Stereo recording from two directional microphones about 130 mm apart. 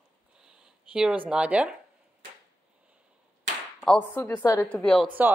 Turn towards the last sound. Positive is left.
turn(degrees=5)  # may be behind; listen again after turning